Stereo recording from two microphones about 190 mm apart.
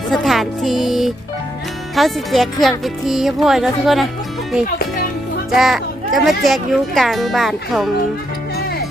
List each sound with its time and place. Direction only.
0.1 s speech: centre (ahead or behind)
5.5 s speech: centre (ahead or behind)